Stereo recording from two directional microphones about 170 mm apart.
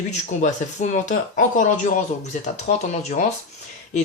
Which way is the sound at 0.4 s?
45° left (ahead or behind).